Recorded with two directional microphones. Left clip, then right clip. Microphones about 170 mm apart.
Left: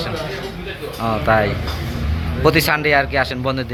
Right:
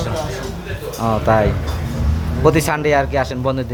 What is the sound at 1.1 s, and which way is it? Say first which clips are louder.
A man's voice: right 1 dB; 20° right (ahead or behind).